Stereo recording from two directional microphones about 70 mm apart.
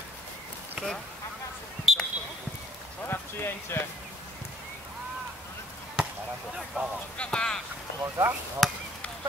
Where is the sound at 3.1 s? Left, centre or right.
Left.